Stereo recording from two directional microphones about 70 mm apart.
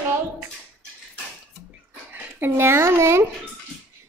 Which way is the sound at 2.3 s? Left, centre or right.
Right.